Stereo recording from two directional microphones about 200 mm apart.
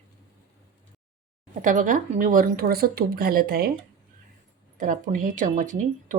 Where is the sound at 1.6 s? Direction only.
40° right (ahead or behind).